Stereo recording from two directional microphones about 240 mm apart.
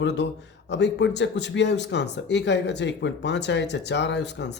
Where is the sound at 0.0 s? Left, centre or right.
Left.